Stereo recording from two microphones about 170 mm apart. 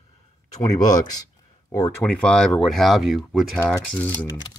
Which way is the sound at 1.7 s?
10° left (ahead or behind).